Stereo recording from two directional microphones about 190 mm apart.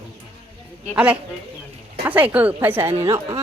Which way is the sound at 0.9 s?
5° right (ahead or behind).